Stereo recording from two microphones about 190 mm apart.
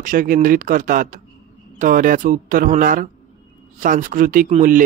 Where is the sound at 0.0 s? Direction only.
45° right (ahead or behind).